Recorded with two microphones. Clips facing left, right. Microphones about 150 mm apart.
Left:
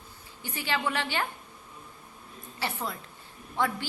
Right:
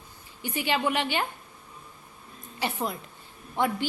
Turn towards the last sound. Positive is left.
turn(degrees=-15)  # may be behind; listen again after turning